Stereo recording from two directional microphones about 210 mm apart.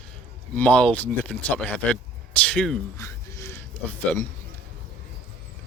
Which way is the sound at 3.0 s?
15° left (ahead or behind).